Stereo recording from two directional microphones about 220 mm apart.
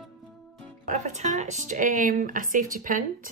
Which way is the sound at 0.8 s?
35° right (ahead or behind).